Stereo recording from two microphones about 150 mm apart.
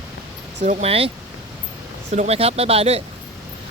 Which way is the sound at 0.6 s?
50° right (ahead or behind).